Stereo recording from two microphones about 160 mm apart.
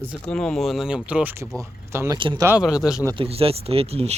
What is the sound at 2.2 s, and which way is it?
Speech, 30° right (ahead or behind).